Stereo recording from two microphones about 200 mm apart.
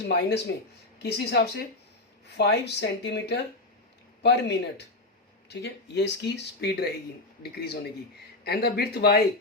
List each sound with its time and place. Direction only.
0.0 s speech: 60° left (ahead or behind)